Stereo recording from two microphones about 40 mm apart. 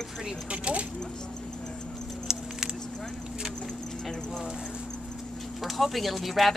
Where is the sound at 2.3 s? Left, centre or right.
Centre.